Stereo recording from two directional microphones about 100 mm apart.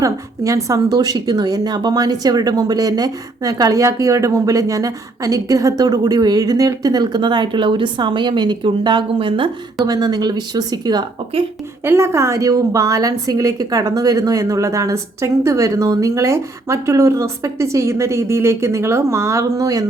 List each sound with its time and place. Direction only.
0.0 s a woman's voice: 35° right (ahead or behind); by 9.5 s 60° right (ahead or behind)
9.8 s a woman's voice: 40° right (ahead or behind)
11.8 s a woman's voice: 25° right (ahead or behind)